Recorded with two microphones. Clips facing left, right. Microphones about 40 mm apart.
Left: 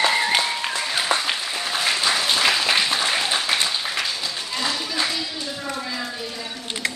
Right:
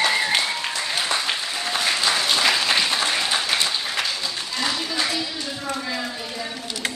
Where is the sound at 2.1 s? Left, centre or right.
Centre.